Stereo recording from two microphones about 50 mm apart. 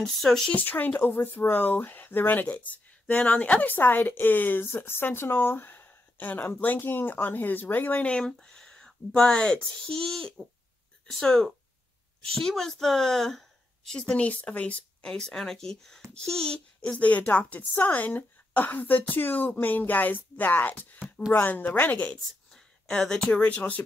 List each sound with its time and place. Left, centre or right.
0.0 s a woman's voice: centre
0.5 s a child's voice: left
8.5 s a sound: centre
9.3 s a woman's voice: centre
15.0 s a woman's voice: centre; by 22.2 s left
22.5 s a sound: centre
23.4 s a woman's voice: left